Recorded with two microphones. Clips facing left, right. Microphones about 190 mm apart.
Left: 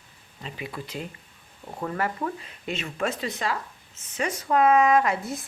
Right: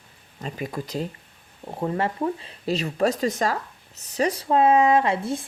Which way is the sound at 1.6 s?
25° right (ahead or behind).